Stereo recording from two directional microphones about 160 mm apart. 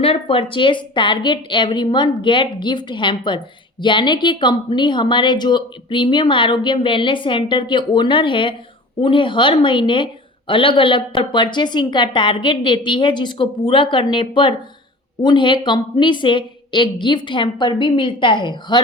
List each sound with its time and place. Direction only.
0.0 s a woman's voice: 35° left (ahead or behind)